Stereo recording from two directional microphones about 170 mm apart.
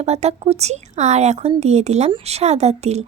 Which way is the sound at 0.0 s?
40° right (ahead or behind).